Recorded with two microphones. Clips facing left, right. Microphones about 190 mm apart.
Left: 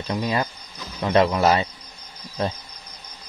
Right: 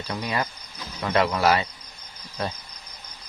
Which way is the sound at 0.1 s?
20° left (ahead or behind).